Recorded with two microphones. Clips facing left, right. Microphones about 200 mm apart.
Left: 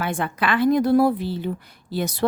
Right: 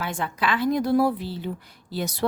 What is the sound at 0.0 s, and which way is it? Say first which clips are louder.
A woman's voice: left 3 dB; 55° left (ahead or behind).